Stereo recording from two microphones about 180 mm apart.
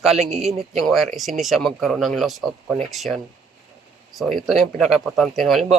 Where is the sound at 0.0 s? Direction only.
Centre (ahead or behind).